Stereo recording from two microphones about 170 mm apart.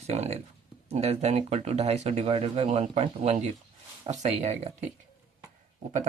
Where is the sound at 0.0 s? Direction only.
40° right (ahead or behind).